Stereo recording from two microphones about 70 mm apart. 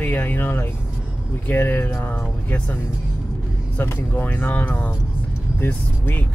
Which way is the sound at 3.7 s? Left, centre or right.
Left.